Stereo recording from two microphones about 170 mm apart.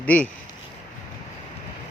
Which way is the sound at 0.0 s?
10° left (ahead or behind).